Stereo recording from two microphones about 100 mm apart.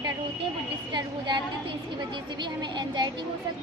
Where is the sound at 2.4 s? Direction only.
50° right (ahead or behind).